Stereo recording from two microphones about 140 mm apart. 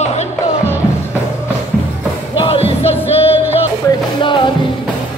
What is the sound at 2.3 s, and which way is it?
Music, 40° left (ahead or behind).